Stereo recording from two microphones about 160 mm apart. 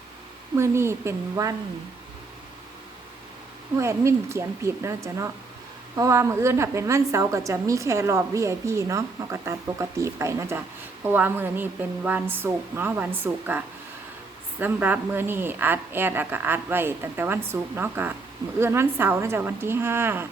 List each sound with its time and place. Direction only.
0.5 s a woman's voice: 15° right (ahead or behind)
3.8 s a woman's voice: 15° right (ahead or behind)
14.6 s a woman's voice: 10° right (ahead or behind)